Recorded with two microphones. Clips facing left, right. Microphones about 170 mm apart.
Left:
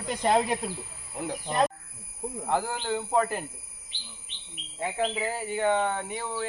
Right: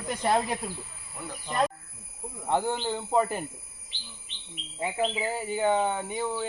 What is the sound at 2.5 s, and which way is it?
Speech, centre (ahead or behind).